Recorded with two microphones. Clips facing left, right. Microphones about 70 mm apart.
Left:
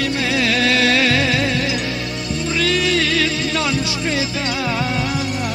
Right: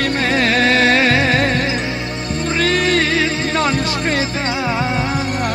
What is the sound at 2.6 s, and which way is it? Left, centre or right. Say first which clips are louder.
Music: right 3 dB; right.